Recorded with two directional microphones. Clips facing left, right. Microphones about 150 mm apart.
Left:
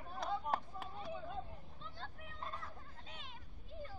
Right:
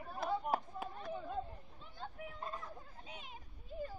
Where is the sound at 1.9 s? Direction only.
10° right (ahead or behind).